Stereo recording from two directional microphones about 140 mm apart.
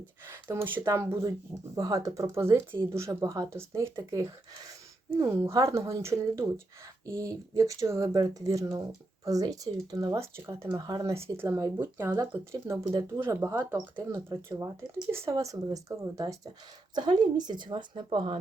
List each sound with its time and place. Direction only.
0.3 s speech: 15° right (ahead or behind); by 18.3 s 35° right (ahead or behind)